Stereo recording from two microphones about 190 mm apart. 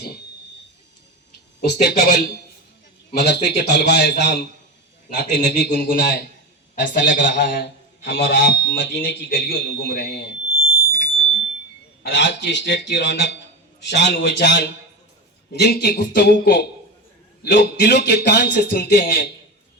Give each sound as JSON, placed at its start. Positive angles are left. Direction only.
{"t": 1.6, "sound": "speech", "side_deg": 60}
{"t": 12.0, "sound": "speech", "side_deg": 65}